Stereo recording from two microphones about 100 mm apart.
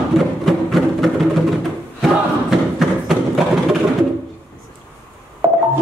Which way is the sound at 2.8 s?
5° right (ahead or behind).